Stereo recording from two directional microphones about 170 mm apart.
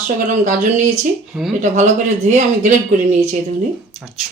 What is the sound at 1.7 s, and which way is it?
Speech, 45° right (ahead or behind).